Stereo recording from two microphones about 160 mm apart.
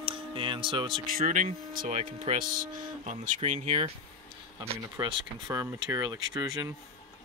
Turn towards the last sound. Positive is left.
turn(degrees=-25)  # may be behind; listen again after turning